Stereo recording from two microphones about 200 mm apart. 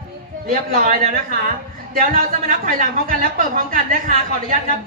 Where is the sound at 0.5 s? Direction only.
50° right (ahead or behind).